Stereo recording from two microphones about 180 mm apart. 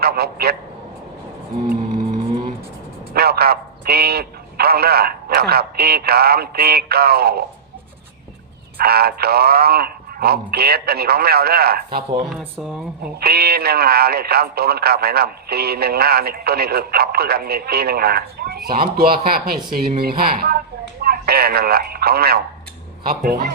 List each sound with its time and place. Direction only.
0.0 s speech: 60° right (ahead or behind)
1.6 s music: 50° right (ahead or behind)
3.1 s speech: 60° right (ahead or behind)
8.8 s speech: 60° right (ahead or behind)
12.4 s speech: 5° right (ahead or behind)
13.1 s speech: 60° right (ahead or behind)